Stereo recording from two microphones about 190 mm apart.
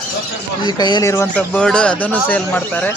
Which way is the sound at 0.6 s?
20° left (ahead or behind).